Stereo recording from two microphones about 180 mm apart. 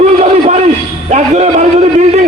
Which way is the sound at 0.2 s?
40° right (ahead or behind).